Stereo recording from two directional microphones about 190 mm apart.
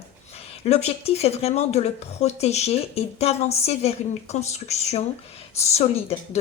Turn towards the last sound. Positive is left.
turn(degrees=35)  # may be behind; listen again after turning